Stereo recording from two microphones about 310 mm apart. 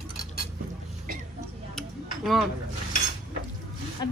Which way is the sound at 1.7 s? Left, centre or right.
Centre.